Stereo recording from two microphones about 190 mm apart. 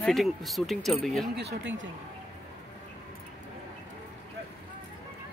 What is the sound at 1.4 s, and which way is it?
Speech, 70° right (ahead or behind).